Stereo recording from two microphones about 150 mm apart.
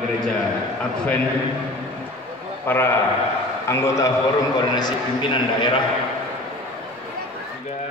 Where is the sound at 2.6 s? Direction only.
15° left (ahead or behind); by 5.8 s 30° left (ahead or behind).